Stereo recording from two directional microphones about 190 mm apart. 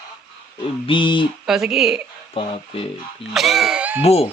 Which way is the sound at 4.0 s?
35° left (ahead or behind).